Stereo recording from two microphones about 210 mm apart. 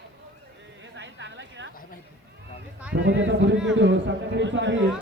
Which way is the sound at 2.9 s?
60° right (ahead or behind).